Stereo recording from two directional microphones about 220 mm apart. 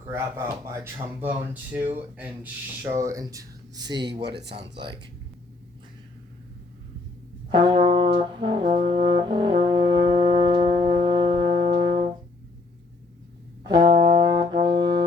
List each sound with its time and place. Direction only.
0.1 s speech: 10° right (ahead or behind)
4.2 s speech: 50° right (ahead or behind)
7.5 s brass instrument: 20° right (ahead or behind)
10.1 s music: 25° right (ahead or behind)
11.4 s brass instrument: 50° right (ahead or behind)
13.7 s brass instrument: 20° right (ahead or behind)